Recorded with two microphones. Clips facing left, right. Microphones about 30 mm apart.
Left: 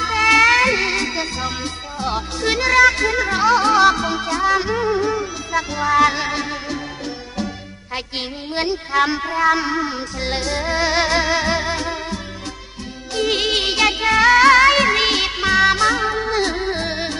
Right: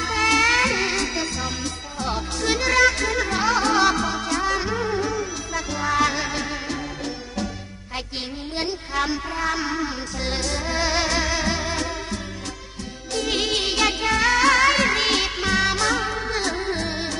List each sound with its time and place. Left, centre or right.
0.0 s music: centre
5.8 s music: centre
8.5 s music: centre
9.3 s music: centre
13.1 s music: centre
16.4 s music: left